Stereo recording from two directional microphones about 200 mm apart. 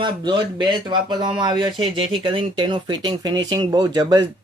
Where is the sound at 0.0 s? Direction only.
25° right (ahead or behind).